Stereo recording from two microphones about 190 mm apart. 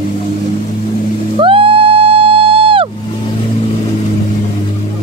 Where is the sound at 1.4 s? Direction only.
30° right (ahead or behind).